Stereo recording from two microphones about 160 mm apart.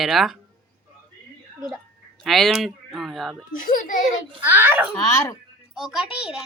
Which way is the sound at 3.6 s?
60° left (ahead or behind).